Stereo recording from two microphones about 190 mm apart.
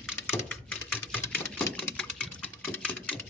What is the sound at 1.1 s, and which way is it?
Engine, 5° left (ahead or behind).